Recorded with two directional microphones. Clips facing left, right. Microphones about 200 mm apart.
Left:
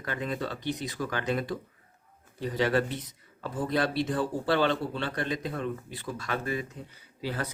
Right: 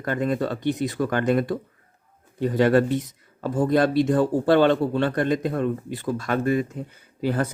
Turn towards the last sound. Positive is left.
turn(degrees=-50)  # may be behind; listen again after turning